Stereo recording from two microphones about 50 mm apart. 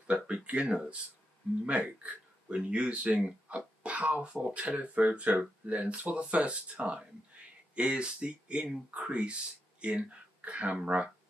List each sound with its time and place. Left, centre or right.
0.0 s speech: right